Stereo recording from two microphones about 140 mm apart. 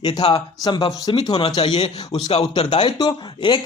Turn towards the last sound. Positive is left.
turn(degrees=35)  # may be behind; listen again after turning